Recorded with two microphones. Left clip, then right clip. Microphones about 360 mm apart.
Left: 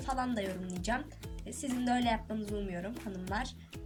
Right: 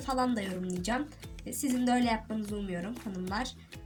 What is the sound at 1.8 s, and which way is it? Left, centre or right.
Speech, left.